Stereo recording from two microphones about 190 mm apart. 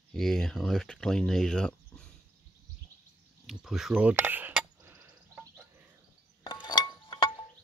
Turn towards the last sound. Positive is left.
turn(degrees=25)  # may be behind; listen again after turning